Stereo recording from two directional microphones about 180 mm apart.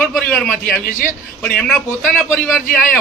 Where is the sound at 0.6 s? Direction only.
45° left (ahead or behind).